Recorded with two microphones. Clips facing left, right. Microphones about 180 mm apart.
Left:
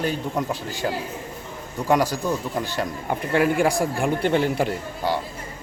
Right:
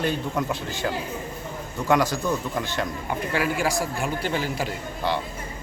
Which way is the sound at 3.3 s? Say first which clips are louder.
Left 6 dB; 55° left (ahead or behind).